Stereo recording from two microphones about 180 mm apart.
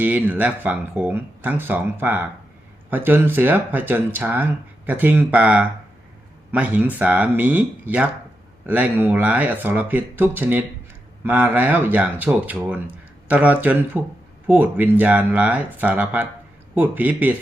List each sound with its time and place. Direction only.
0.0 s speech: 10° right (ahead or behind)